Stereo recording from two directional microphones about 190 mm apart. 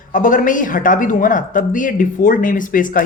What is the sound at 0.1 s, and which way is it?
Speech, 45° left (ahead or behind).